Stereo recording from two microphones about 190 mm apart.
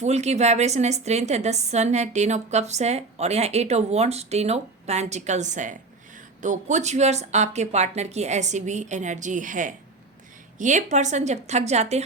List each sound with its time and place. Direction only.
0.0 s a woman's voice: 35° right (ahead or behind)